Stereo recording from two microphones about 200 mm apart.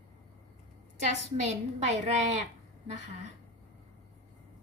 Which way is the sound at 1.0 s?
35° right (ahead or behind).